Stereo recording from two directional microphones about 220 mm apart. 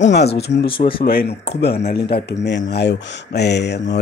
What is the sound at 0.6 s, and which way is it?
Speech, 25° left (ahead or behind).